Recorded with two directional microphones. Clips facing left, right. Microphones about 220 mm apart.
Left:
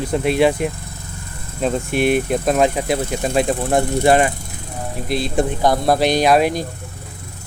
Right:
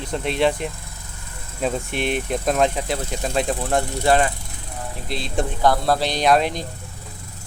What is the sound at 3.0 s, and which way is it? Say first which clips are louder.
Speech: left 5 dB; 55° left (ahead or behind).